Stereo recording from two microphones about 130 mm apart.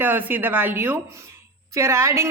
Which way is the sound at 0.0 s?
15° right (ahead or behind).